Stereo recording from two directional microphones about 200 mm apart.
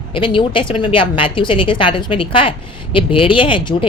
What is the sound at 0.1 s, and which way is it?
A woman's voice, 25° left (ahead or behind).